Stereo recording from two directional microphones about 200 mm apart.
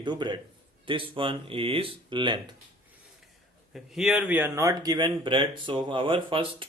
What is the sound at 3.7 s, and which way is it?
Speech, centre (ahead or behind).